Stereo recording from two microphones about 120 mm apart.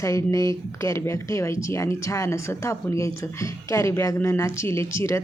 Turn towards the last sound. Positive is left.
turn(degrees=25)  # may be behind; listen again after turning